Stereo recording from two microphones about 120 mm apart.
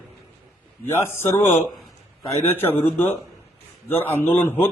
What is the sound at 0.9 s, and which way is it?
A man's voice, 20° left (ahead or behind).